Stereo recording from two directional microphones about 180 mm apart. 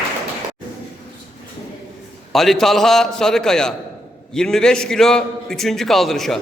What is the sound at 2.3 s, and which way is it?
A man's voice, centre (ahead or behind).